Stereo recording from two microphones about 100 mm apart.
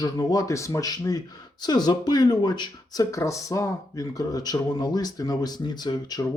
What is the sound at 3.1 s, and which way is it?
A man's voice, 30° left (ahead or behind).